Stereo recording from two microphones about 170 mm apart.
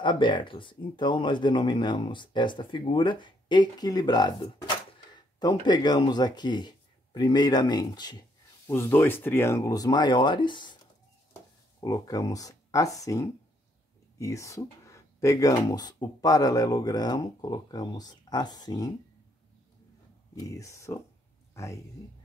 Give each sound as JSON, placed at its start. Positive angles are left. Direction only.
{"t": 0.0, "sound": "speech", "side_deg": 30}
{"t": 11.8, "sound": "speech", "side_deg": 20}
{"t": 20.3, "sound": "speech", "side_deg": 20}